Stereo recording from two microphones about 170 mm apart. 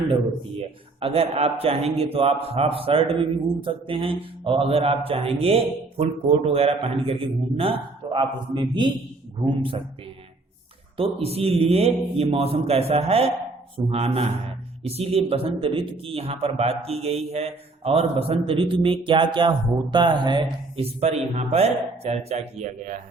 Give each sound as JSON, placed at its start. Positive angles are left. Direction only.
{"t": 0.9, "sound": "a man's voice", "side_deg": -35}
{"t": 10.9, "sound": "a man's voice", "side_deg": -35}